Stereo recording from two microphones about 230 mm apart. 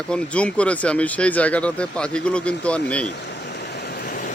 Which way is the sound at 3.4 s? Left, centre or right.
Left.